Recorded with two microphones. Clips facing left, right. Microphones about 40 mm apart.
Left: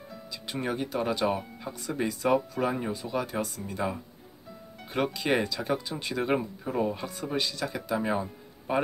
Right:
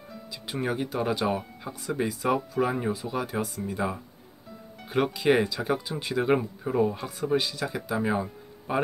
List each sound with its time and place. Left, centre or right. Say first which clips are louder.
0.1 s speech: right 1 dB; centre